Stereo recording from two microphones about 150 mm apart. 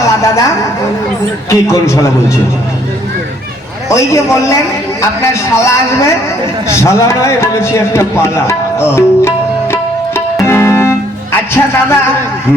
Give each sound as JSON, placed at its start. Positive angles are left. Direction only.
{"t": 0.0, "sound": "a sound", "side_deg": 20}
{"t": 1.5, "sound": "a man's voice", "side_deg": 20}
{"t": 3.8, "sound": "a man's voice", "side_deg": 20}
{"t": 9.7, "sound": "music", "side_deg": 15}